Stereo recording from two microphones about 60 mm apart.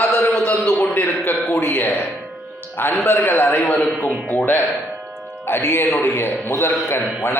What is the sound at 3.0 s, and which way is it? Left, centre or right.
Speech, left.